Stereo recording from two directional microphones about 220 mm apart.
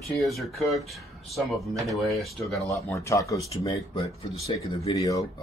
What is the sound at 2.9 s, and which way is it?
Speech, 15° left (ahead or behind).